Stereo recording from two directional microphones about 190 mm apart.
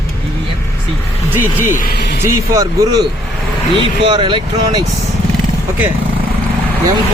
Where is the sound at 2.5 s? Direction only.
20° right (ahead or behind).